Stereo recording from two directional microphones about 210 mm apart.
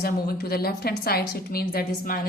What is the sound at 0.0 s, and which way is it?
A woman's voice, 45° left (ahead or behind).